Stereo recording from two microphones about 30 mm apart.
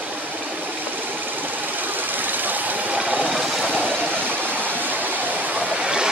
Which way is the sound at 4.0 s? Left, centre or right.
Right.